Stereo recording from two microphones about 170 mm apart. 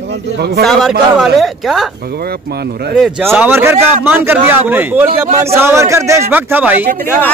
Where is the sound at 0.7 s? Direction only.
Centre (ahead or behind).